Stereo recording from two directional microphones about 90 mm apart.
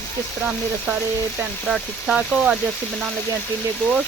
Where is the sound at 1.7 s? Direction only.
5° right (ahead or behind).